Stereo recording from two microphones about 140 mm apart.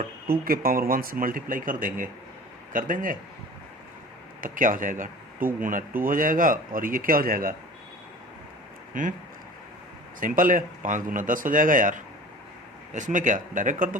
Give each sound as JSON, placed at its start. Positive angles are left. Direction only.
{"t": 0.3, "sound": "speech", "side_deg": -90}
{"t": 4.4, "sound": "speech", "side_deg": -75}
{"t": 8.9, "sound": "speech", "side_deg": -70}
{"t": 10.2, "sound": "speech", "side_deg": -75}